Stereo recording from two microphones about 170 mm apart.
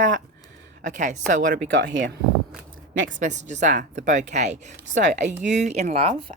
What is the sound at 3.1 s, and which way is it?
Speech, 45° right (ahead or behind).